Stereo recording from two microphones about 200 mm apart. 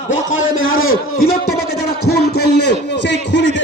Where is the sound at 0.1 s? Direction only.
75° left (ahead or behind).